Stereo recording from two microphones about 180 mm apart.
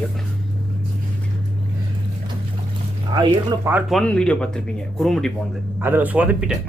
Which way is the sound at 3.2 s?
25° right (ahead or behind).